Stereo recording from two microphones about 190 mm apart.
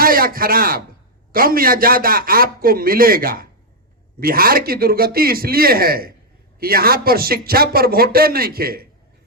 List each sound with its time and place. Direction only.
0.0 s a man's voice: 50° right (ahead or behind)